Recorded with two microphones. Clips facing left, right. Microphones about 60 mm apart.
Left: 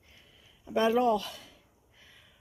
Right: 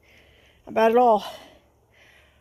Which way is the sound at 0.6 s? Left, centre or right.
Right.